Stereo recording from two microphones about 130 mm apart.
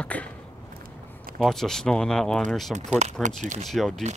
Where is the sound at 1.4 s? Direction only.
5° left (ahead or behind).